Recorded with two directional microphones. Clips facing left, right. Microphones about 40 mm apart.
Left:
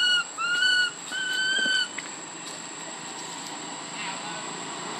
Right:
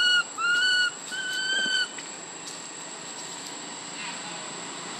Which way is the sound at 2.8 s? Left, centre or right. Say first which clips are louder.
Left 2 dB; centre.